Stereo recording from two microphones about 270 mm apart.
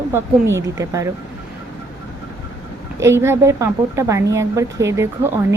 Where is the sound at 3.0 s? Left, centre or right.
Centre.